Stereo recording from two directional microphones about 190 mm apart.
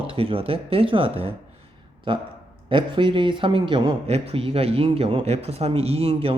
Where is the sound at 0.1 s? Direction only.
30° right (ahead or behind).